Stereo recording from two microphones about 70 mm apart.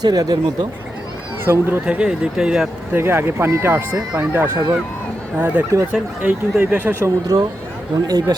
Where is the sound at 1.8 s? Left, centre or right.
Centre.